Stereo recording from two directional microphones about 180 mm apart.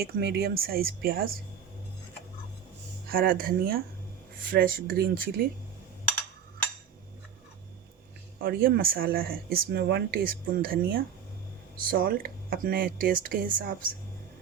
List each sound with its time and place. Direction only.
0.0 s speech: 60° right (ahead or behind)
3.1 s speech: 55° right (ahead or behind)
8.4 s speech: 55° right (ahead or behind)